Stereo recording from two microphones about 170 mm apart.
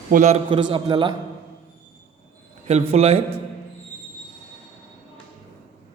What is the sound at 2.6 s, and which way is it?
Speech, 40° right (ahead or behind).